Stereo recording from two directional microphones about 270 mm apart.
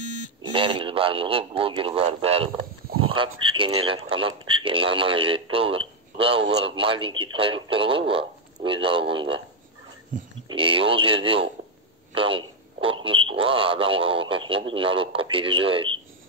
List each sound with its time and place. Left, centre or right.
0.4 s a man's voice: centre